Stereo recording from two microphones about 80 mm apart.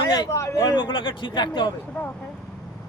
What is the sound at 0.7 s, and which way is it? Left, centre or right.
Speech, left.